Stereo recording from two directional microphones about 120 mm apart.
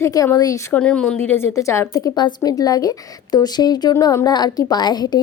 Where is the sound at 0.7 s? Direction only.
10° left (ahead or behind).